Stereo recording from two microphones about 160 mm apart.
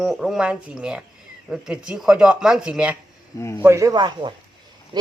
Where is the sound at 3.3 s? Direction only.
15° left (ahead or behind).